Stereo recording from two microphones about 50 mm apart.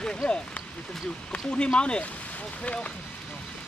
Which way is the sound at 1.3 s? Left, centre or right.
Centre.